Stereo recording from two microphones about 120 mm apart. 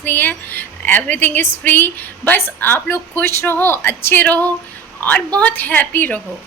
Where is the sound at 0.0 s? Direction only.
15° left (ahead or behind).